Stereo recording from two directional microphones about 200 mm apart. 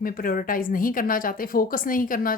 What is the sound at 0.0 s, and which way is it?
A woman's voice, 45° left (ahead or behind).